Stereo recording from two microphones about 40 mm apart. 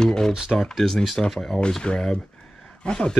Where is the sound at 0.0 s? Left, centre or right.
Centre.